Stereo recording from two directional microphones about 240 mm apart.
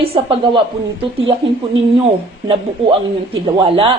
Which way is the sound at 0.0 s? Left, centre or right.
Right.